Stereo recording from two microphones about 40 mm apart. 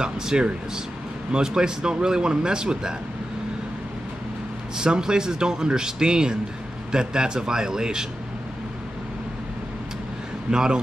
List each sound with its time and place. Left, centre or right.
0.0 s a man's voice: right
4.7 s a man's voice: centre
10.5 s a man's voice: centre